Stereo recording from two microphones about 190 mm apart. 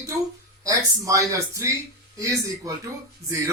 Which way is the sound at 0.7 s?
15° right (ahead or behind).